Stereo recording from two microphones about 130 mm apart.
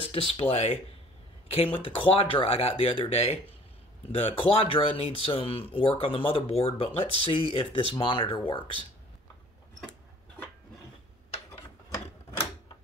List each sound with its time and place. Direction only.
0.1 s speech: 45° left (ahead or behind)